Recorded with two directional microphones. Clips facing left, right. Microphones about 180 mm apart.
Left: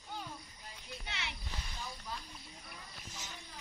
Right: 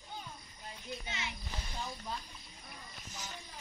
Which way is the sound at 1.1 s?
75° left (ahead or behind).